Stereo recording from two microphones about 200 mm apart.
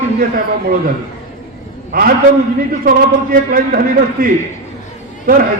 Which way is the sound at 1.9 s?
45° right (ahead or behind).